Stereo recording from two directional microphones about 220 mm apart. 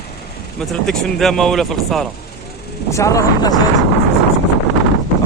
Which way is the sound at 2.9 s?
15° left (ahead or behind).